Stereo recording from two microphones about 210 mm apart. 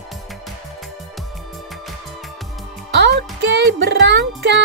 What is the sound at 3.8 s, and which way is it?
Speech, 55° right (ahead or behind).